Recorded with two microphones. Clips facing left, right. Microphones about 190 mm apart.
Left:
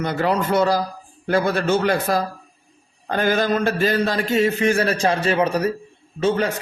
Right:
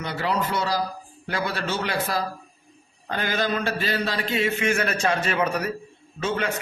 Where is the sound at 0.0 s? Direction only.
50° left (ahead or behind).